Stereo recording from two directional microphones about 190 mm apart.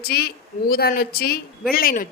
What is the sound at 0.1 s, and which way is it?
A woman's voice, 55° left (ahead or behind).